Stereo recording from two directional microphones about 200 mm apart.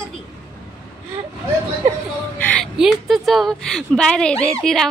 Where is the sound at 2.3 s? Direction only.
10° left (ahead or behind).